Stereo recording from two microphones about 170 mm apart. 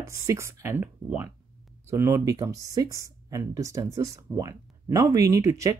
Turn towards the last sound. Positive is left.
turn(degrees=-20)  # may be behind; listen again after turning